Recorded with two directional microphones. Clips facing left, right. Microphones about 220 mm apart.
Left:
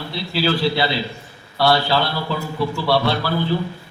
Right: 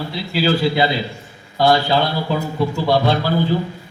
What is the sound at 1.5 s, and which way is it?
A man's voice, 15° right (ahead or behind).